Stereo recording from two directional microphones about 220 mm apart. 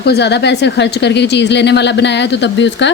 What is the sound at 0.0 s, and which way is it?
A woman's voice, 50° left (ahead or behind).